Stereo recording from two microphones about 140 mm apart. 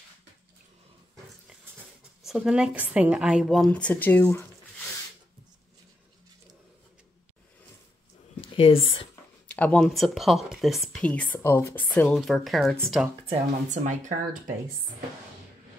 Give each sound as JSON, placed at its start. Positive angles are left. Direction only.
{"t": 2.2, "sound": "speech", "side_deg": -5}
{"t": 8.5, "sound": "speech", "side_deg": 40}
{"t": 9.5, "sound": "speech", "side_deg": 10}
{"t": 13.3, "sound": "speech", "side_deg": -60}